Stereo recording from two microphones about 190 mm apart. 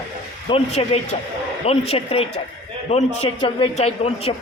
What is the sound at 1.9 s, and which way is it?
Speech, 30° left (ahead or behind).